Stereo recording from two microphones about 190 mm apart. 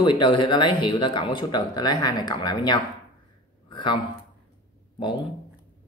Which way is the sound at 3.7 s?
25° left (ahead or behind).